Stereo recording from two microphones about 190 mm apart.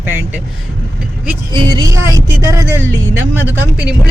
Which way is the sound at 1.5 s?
20° right (ahead or behind).